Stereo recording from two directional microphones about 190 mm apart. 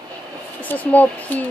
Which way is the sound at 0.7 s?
10° left (ahead or behind).